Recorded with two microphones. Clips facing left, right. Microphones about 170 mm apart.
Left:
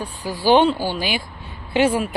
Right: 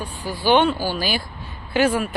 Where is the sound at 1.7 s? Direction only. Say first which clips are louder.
Left 1 dB; 30° left (ahead or behind).